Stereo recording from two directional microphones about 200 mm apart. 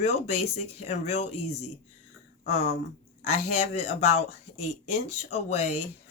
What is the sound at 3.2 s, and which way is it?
Speech, 35° left (ahead or behind).